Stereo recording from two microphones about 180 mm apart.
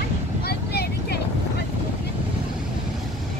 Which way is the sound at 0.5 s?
60° left (ahead or behind).